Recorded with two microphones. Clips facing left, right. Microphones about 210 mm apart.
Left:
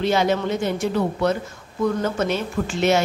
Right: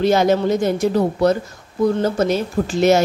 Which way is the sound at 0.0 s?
40° right (ahead or behind).